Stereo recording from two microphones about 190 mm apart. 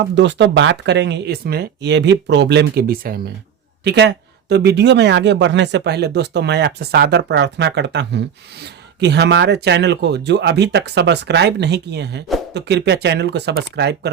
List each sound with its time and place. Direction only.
0.0 s speech: 65° right (ahead or behind); by 3.2 s 50° right (ahead or behind)
3.8 s speech: 60° right (ahead or behind)